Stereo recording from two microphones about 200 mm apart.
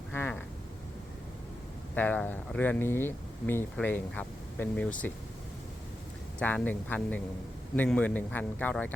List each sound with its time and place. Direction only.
0.1 s vehicle: 10° left (ahead or behind)
2.0 s speech: 10° left (ahead or behind)
6.4 s speech: 10° left (ahead or behind)